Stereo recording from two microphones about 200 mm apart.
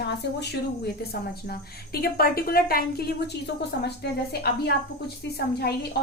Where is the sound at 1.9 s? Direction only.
50° left (ahead or behind).